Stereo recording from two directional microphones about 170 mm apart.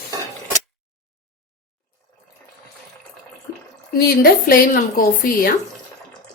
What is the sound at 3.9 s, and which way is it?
A woman's voice, 65° left (ahead or behind).